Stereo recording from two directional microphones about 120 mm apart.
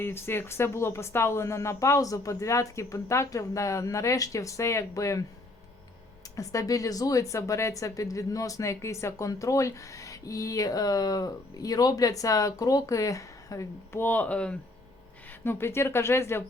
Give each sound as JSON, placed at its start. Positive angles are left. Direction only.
{"t": 0.0, "sound": "speech", "side_deg": 20}
{"t": 6.3, "sound": "speech", "side_deg": 25}